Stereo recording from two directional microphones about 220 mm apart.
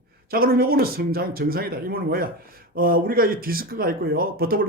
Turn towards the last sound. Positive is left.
turn(degrees=-40)  # may be behind; listen again after turning